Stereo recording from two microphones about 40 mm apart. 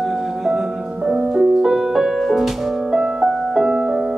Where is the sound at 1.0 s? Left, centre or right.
Right.